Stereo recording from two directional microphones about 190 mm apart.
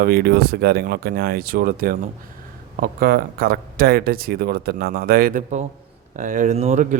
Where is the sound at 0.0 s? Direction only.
55° right (ahead or behind).